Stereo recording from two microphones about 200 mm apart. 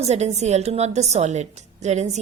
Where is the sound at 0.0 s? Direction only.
35° right (ahead or behind).